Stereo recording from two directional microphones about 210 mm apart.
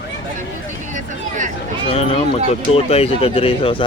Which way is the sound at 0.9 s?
35° right (ahead or behind).